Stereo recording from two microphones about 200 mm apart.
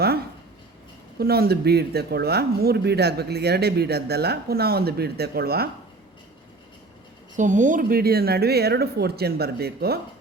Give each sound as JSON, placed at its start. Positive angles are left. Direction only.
{"t": 1.2, "sound": "speech", "side_deg": -50}
{"t": 7.3, "sound": "speech", "side_deg": -40}